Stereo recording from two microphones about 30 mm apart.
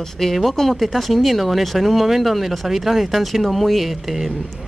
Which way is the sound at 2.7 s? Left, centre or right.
Centre.